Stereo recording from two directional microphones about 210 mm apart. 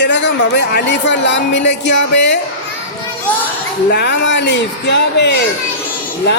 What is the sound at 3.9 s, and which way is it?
A woman's voice, 55° left (ahead or behind).